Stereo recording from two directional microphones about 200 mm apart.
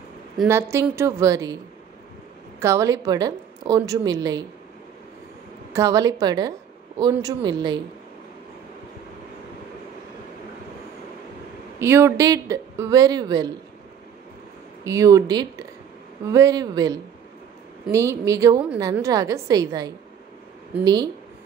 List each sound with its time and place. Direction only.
0.5 s a woman's voice: 15° right (ahead or behind)
2.6 s a woman's voice: 15° right (ahead or behind)
5.7 s a woman's voice: 15° right (ahead or behind)
11.8 s a woman's voice: 10° right (ahead or behind)
14.9 s a woman's voice: 15° right (ahead or behind)